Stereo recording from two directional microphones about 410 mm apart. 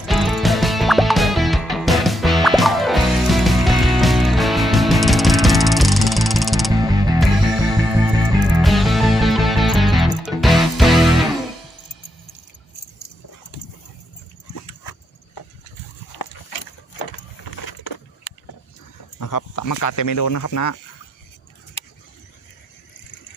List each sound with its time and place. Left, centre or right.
0.0 s music: centre
16.1 s dog: left
19.2 s a sound: left